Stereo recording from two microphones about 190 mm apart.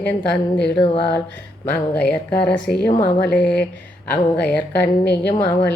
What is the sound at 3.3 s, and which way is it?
Mantra, 5° left (ahead or behind).